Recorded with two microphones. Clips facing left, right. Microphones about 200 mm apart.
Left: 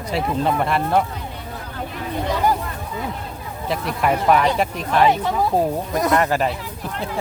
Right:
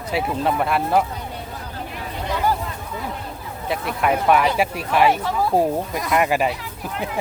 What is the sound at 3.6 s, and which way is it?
Speech, centre (ahead or behind).